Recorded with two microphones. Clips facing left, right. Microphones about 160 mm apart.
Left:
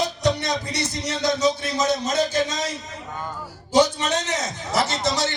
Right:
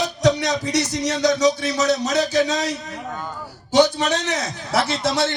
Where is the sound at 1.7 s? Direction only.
70° right (ahead or behind).